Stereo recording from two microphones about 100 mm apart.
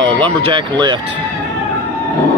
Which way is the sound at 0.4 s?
55° right (ahead or behind).